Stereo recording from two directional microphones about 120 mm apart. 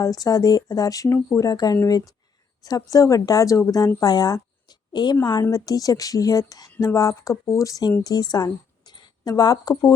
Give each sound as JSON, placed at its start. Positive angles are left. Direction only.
{"t": 0.0, "sound": "a woman's voice", "side_deg": 30}